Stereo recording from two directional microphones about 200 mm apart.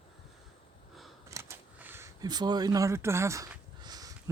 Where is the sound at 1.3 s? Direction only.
15° right (ahead or behind).